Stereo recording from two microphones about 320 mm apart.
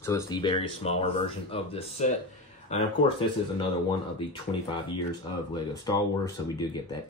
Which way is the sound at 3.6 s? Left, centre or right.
Centre.